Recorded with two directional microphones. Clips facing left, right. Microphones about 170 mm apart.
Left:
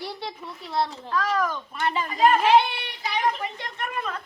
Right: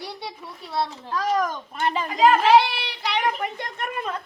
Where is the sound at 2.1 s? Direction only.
85° right.